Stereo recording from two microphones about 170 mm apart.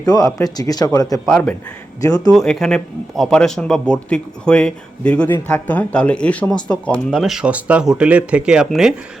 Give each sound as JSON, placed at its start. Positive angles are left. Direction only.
{"t": 0.0, "sound": "speech", "side_deg": 20}
{"t": 1.2, "sound": "a man's voice", "side_deg": 5}
{"t": 2.0, "sound": "speech", "side_deg": 20}
{"t": 2.3, "sound": "a man's voice", "side_deg": 0}